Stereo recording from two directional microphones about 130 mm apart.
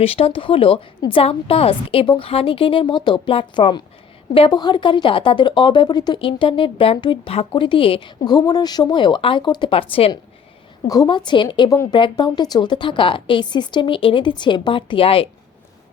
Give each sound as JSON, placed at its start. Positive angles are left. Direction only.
{"t": 0.0, "sound": "a woman's voice", "side_deg": 50}
{"t": 8.2, "sound": "speech", "side_deg": 30}
{"t": 10.8, "sound": "speech", "side_deg": 30}
{"t": 11.7, "sound": "speech", "side_deg": 25}
{"t": 11.9, "sound": "speech", "side_deg": 35}